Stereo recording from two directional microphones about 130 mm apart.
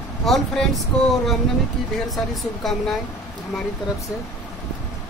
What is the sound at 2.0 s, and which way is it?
Speech, centre (ahead or behind).